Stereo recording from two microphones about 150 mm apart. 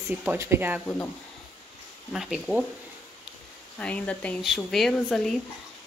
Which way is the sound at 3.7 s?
10° left (ahead or behind).